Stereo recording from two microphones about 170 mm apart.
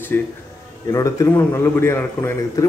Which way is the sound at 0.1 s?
10° left (ahead or behind).